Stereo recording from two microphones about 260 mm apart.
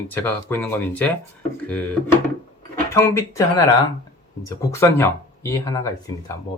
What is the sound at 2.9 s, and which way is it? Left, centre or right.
Speech, centre.